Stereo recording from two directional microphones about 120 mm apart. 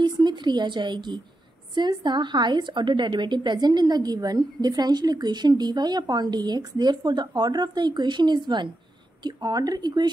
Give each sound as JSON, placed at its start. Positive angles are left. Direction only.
{"t": 0.0, "sound": "a woman's voice", "side_deg": -40}